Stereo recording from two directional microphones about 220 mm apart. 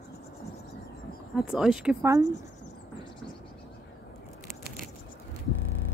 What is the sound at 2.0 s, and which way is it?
Speech, 15° right (ahead or behind).